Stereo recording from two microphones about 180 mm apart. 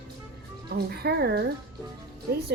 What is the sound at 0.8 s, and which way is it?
Speech, 60° right (ahead or behind).